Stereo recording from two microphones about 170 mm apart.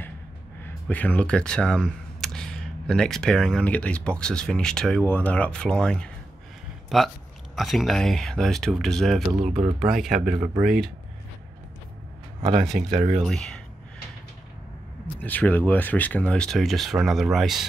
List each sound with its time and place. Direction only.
0.8 s speech: 10° left (ahead or behind)
9.4 s speech: 40° right (ahead or behind)
9.8 s speech: centre (ahead or behind)
12.4 s speech: 30° right (ahead or behind)
12.6 s speech: centre (ahead or behind)
12.9 s speech: 40° right (ahead or behind)
13.2 s speech: 5° left (ahead or behind)
15.1 s speech: 10° left (ahead or behind)